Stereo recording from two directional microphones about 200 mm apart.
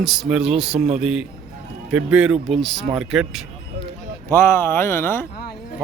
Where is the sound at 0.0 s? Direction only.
Centre (ahead or behind).